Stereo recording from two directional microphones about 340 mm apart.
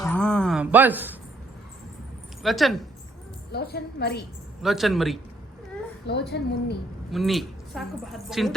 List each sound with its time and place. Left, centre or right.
0.0 s a sound: centre
2.4 s a woman's voice: centre
3.5 s a woman's voice: left
4.6 s a woman's voice: centre
6.1 s a woman's voice: left
7.1 s a woman's voice: centre